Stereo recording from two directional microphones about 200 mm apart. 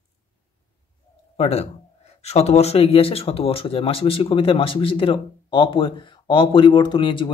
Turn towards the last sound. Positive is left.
turn(degrees=25)  # may be behind; listen again after turning